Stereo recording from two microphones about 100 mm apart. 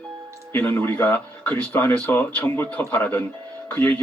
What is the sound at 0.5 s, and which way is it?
A man's voice, 20° left (ahead or behind).